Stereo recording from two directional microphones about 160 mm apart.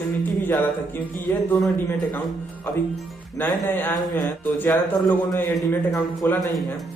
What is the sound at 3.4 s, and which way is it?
A man's voice, 10° left (ahead or behind).